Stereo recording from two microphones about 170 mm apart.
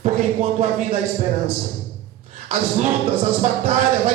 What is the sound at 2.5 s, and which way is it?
Speech, 45° right (ahead or behind).